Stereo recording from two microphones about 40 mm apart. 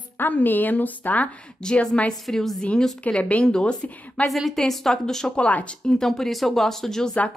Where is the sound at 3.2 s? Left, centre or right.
Left.